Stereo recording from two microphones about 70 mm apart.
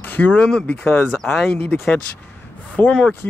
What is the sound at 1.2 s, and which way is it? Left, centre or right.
Speech, centre.